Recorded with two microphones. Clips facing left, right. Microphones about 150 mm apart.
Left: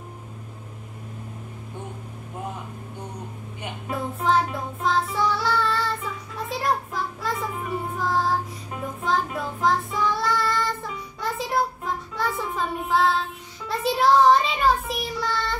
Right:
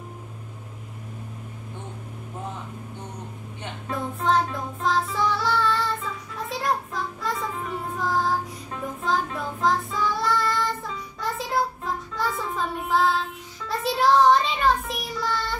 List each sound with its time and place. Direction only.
3.6 s child singing: 5° left (ahead or behind)